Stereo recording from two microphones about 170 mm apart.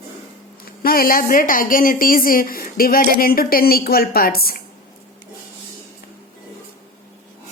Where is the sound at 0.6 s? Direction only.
60° left (ahead or behind).